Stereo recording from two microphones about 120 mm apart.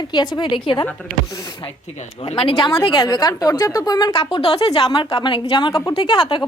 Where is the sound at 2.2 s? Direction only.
45° left (ahead or behind).